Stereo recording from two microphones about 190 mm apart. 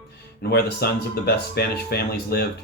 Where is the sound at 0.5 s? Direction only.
55° left (ahead or behind).